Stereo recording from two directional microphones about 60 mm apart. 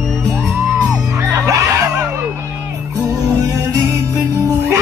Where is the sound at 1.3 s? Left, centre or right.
Right.